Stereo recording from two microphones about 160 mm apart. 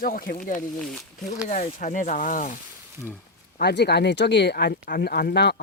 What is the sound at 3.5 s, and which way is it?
Speech, 90° left.